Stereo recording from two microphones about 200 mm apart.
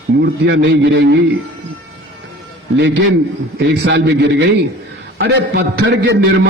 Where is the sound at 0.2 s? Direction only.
60° right (ahead or behind).